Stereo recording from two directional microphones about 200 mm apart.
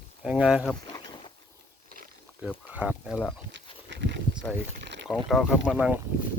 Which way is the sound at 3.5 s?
60° right (ahead or behind).